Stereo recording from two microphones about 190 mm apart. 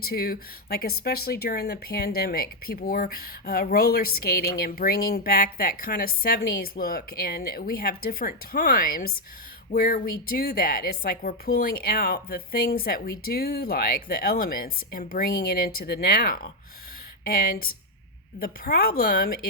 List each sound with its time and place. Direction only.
0.0 s a woman's voice: 55° left (ahead or behind)